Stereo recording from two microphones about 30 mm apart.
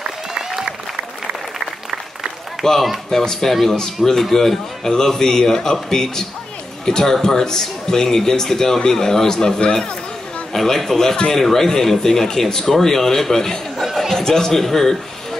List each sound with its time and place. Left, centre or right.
2.6 s a man's voice: centre
10.5 s a man's voice: centre